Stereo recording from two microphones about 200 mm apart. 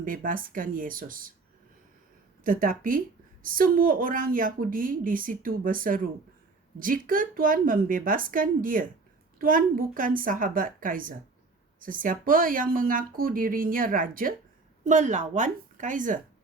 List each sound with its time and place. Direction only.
0.0 s a woman's voice: 45° right (ahead or behind)
2.4 s a woman's voice: 45° right (ahead or behind)